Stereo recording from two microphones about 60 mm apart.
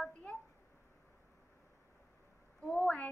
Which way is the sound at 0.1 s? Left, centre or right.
Left.